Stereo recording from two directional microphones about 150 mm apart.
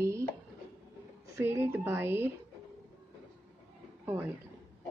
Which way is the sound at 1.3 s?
15° right (ahead or behind).